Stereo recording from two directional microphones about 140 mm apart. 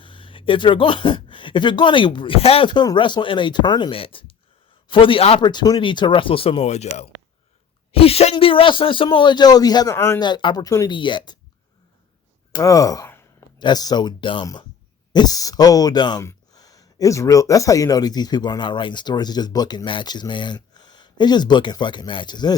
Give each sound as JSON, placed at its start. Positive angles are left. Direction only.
{"t": 0.0, "sound": "speech", "side_deg": 35}
{"t": 5.4, "sound": "speech", "side_deg": 30}
{"t": 10.2, "sound": "speech", "side_deg": 30}
{"t": 10.9, "sound": "speech", "side_deg": 35}
{"t": 12.5, "sound": "speech", "side_deg": 25}
{"t": 13.6, "sound": "speech", "side_deg": 30}